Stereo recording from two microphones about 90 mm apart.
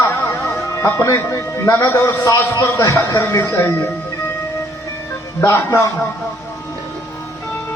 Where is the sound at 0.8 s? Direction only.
30° left (ahead or behind).